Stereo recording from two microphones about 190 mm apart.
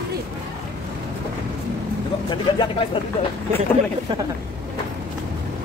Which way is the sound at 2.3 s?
25° left (ahead or behind).